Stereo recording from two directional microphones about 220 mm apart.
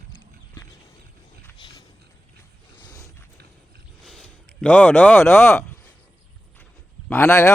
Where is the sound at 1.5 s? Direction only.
20° left (ahead or behind).